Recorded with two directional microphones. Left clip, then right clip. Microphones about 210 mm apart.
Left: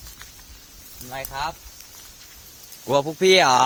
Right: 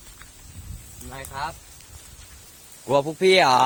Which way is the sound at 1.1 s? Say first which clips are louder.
Left 3 dB; 50° left (ahead or behind).